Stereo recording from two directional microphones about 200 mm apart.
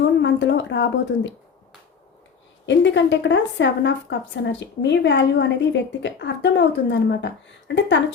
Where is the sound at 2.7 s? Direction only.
65° left (ahead or behind).